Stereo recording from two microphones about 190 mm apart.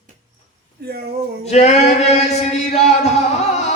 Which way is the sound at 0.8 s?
55° right (ahead or behind).